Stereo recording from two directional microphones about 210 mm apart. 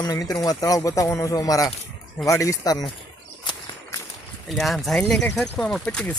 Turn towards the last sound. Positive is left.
turn(degrees=5)  # may be behind; listen again after turning